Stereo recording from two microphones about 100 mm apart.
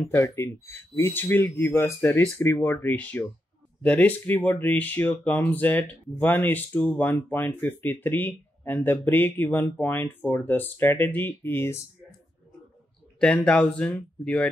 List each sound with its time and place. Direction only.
0.1 s speech: 25° left (ahead or behind)
13.2 s speech: 10° left (ahead or behind)